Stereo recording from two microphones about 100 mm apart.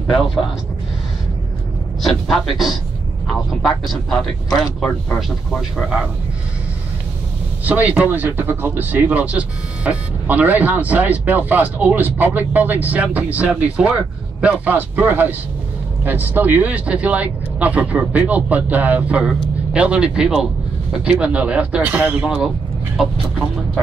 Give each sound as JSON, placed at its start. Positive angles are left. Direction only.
{"t": 0.1, "sound": "speech", "side_deg": 0}
{"t": 2.0, "sound": "speech", "side_deg": 0}
{"t": 5.8, "sound": "speech", "side_deg": -5}
{"t": 7.6, "sound": "speech", "side_deg": -15}